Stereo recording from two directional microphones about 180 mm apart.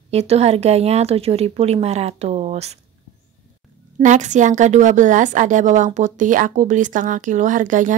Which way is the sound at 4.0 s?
40° right (ahead or behind).